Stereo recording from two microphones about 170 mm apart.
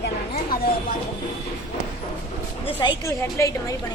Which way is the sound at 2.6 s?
30° left (ahead or behind).